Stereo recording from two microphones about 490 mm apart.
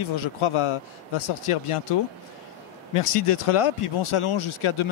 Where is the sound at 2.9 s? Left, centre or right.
Left.